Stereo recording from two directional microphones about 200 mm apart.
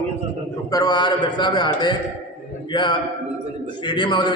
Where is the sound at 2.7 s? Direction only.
20° left (ahead or behind).